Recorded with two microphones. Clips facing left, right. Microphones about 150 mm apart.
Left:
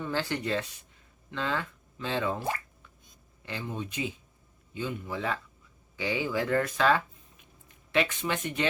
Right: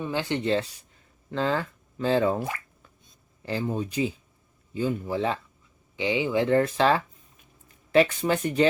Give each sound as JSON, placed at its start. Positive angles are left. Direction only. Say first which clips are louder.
{"t": 0.0, "sound": "speech", "louder": "right 4 dB", "side_deg": -15}
{"t": 3.4, "sound": "speech", "louder": "right 8 dB", "side_deg": -35}